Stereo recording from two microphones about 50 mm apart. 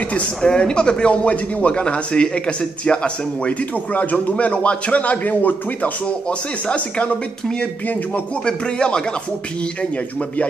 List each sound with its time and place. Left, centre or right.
0.4 s speech: centre
3.9 s a man's voice: left
8.5 s speech: centre